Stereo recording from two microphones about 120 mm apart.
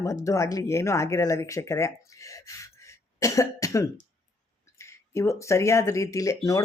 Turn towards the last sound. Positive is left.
turn(degrees=30)  # may be behind; listen again after turning